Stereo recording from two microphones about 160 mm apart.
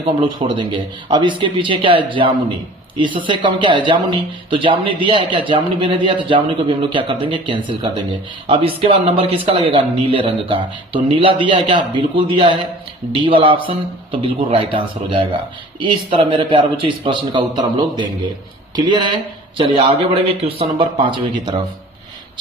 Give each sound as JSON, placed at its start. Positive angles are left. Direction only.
{"t": 0.0, "sound": "speech", "side_deg": -30}